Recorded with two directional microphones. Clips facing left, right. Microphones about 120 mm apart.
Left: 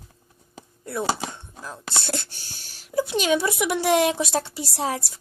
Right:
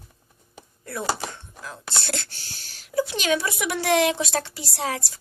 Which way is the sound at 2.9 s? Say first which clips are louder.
Left 2 dB; 25° left (ahead or behind).